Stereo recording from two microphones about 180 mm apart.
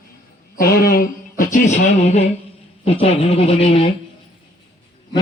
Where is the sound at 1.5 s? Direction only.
40° left (ahead or behind).